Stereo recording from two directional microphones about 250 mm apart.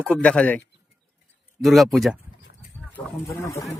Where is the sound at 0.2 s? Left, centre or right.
Centre.